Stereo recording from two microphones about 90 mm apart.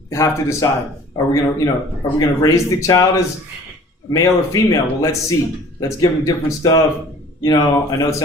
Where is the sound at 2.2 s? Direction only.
40° left (ahead or behind).